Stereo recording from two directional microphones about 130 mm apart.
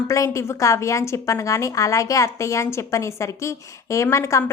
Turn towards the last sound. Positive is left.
turn(degrees=25)  # may be behind; listen again after turning